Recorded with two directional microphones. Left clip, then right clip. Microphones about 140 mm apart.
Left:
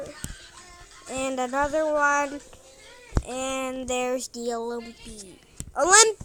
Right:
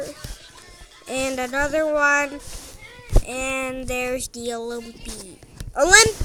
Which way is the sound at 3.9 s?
15° right (ahead or behind).